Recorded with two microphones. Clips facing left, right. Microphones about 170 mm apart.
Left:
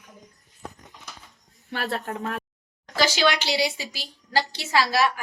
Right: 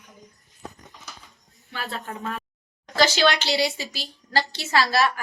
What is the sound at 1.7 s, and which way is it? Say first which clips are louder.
Speech: left 4 dB; 65° left (ahead or behind).